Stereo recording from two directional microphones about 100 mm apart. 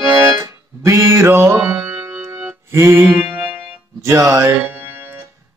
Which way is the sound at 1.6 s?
15° right (ahead or behind).